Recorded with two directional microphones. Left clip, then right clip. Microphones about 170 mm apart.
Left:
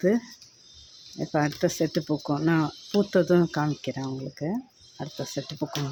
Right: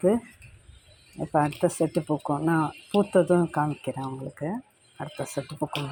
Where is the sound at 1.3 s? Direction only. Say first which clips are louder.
Right 2 dB; 25° left (ahead or behind).